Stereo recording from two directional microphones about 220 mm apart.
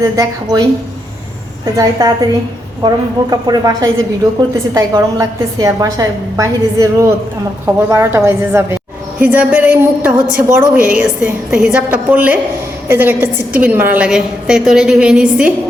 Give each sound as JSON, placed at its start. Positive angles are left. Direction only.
{"t": 0.0, "sound": "a woman's voice", "side_deg": -15}
{"t": 1.7, "sound": "a woman's voice", "side_deg": -15}